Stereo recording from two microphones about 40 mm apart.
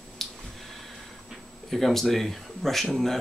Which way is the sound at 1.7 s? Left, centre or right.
Centre.